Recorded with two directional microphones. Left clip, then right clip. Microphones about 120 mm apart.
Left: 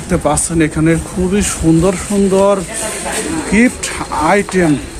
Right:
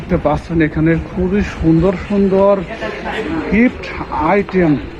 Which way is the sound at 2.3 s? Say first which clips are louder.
Even; 55° left (ahead or behind).